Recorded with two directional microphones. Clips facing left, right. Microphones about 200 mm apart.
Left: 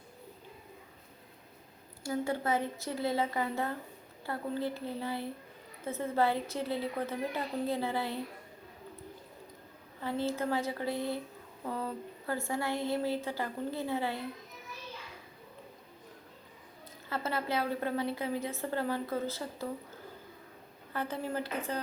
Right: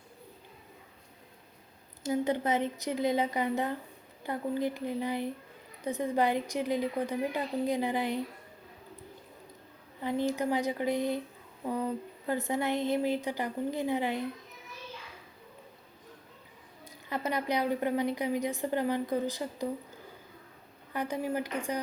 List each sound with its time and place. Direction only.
2.0 s a woman's voice: 20° right (ahead or behind)
10.0 s a woman's voice: 15° right (ahead or behind)
17.1 s a woman's voice: 15° right (ahead or behind)
20.9 s a woman's voice: 15° right (ahead or behind)